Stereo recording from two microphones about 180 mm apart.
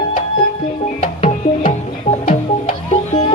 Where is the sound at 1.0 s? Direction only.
40° left (ahead or behind).